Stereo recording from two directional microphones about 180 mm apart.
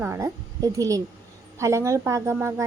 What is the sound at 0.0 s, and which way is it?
A child's voice, 15° right (ahead or behind).